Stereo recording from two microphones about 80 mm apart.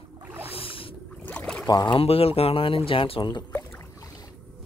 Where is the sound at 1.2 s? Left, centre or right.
Centre.